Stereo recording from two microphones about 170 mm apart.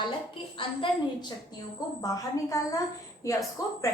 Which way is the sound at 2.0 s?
20° left (ahead or behind).